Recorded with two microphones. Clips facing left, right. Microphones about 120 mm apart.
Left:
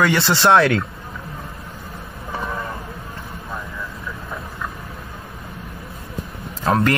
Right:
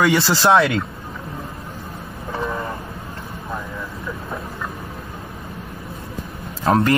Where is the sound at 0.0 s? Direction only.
5° right (ahead or behind).